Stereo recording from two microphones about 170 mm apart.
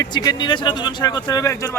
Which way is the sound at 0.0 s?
25° left (ahead or behind).